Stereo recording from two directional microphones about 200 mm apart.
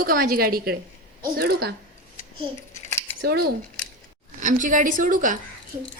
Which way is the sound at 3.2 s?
50° right (ahead or behind).